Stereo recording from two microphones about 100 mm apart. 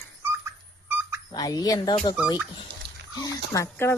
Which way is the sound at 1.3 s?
40° left (ahead or behind).